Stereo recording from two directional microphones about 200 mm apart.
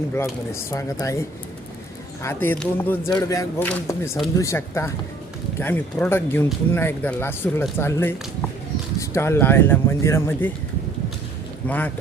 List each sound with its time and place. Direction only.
0.2 s speech: 15° left (ahead or behind)
11.6 s speech: 10° left (ahead or behind)